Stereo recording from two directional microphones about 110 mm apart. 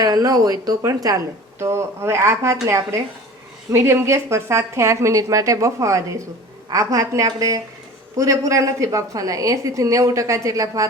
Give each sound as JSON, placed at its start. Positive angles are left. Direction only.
{"t": 0.0, "sound": "a woman's voice", "side_deg": -35}